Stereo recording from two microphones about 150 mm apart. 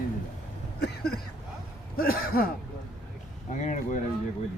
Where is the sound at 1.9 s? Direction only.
80° left.